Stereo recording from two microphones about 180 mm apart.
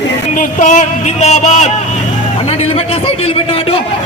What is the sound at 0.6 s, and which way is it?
Music, 45° left (ahead or behind).